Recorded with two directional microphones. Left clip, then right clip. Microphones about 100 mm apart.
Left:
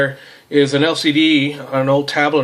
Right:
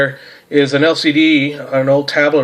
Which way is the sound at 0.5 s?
15° left (ahead or behind).